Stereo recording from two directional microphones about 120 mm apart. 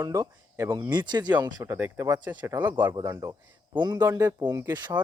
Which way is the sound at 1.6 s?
15° right (ahead or behind).